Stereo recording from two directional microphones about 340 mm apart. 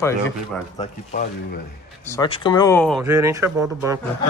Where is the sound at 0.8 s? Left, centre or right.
Left.